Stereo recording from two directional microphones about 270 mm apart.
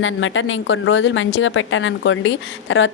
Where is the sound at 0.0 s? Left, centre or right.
Left.